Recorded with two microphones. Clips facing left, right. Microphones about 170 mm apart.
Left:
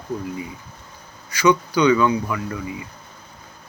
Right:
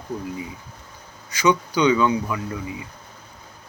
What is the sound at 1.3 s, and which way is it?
Speech, 20° right (ahead or behind).